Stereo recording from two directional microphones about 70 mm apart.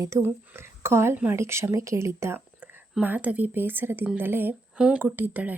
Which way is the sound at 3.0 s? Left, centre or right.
Right.